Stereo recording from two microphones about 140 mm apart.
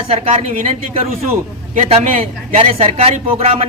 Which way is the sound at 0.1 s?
45° right (ahead or behind).